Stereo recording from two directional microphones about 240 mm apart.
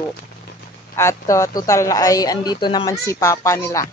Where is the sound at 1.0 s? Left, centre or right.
Centre.